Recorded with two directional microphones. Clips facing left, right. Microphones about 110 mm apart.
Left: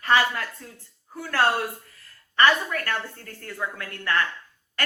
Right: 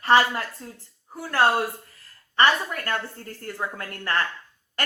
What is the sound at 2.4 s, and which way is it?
Speech, 20° right (ahead or behind).